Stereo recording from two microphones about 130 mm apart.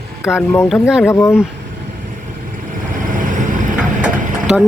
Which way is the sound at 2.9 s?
90° right.